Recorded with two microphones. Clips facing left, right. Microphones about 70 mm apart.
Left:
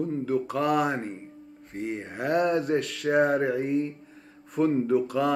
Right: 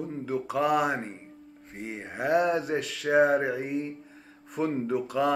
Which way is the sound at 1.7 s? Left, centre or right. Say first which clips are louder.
Left 5 dB; centre.